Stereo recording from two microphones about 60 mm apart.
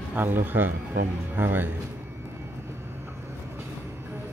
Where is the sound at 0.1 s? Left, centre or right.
Right.